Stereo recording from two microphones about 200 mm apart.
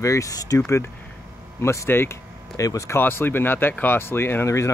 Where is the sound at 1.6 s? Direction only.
15° left (ahead or behind).